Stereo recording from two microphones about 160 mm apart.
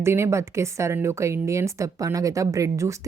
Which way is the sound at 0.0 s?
15° right (ahead or behind).